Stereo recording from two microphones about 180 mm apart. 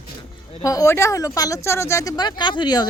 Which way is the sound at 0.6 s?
20° left (ahead or behind).